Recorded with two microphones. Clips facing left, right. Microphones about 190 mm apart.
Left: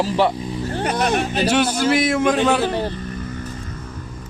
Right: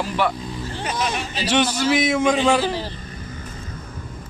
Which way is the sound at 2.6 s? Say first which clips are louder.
Left 3 dB; 60° left (ahead or behind).